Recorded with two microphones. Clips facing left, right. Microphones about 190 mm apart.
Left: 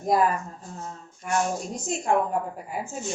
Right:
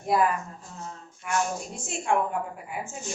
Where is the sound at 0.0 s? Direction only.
40° left (ahead or behind).